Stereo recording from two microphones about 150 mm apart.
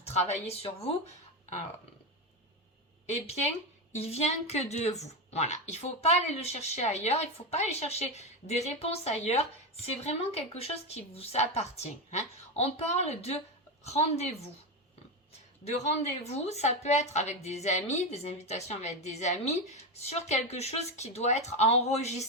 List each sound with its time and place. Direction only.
0.0 s speech: 45° left (ahead or behind)
3.1 s speech: 45° left (ahead or behind)
15.6 s speech: 45° left (ahead or behind)